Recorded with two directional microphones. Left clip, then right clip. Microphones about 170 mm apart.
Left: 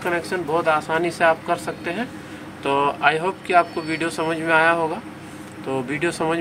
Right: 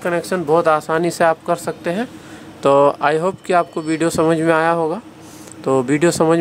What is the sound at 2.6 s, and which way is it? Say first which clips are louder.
Speech: right 6 dB; 80° right.